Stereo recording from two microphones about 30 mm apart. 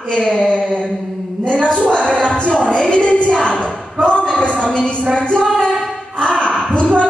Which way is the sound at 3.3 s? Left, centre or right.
Left.